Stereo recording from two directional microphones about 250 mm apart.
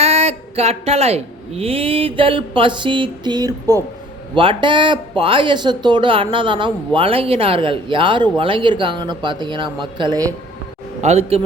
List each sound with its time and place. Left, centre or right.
0.0 s speech: right
11.0 s speech: right